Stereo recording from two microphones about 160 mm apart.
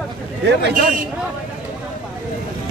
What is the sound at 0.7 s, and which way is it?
Speech, 60° right (ahead or behind).